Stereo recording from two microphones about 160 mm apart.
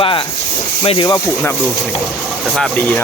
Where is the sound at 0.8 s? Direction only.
30° left (ahead or behind).